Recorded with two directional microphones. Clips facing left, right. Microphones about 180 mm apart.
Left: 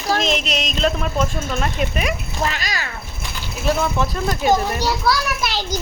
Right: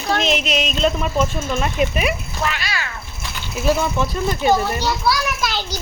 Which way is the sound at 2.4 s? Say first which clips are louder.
Right 1 dB; 40° left (ahead or behind).